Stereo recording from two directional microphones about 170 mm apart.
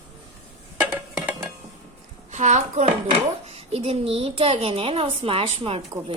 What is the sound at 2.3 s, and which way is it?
A child's voice, 45° right (ahead or behind).